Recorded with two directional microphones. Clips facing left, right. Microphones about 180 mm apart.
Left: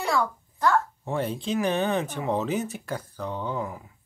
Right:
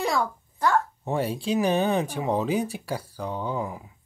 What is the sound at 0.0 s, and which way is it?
Speech, 15° right (ahead or behind).